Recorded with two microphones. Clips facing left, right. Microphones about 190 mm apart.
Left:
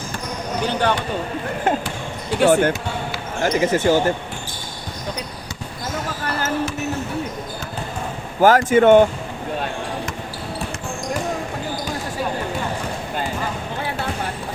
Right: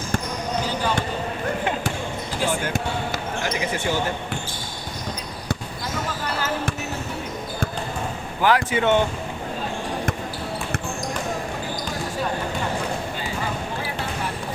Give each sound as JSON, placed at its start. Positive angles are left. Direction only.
{"t": 0.7, "sound": "basketball bounce", "side_deg": 65}
{"t": 2.4, "sound": "speech", "side_deg": 65}
{"t": 3.4, "sound": "speech", "side_deg": 45}
{"t": 8.4, "sound": "speech", "side_deg": 45}